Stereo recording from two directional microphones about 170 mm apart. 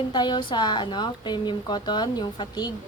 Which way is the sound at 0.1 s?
25° left (ahead or behind).